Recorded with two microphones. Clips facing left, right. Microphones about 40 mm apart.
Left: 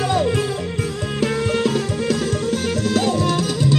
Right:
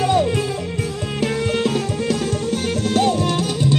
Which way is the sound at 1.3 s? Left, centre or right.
Centre.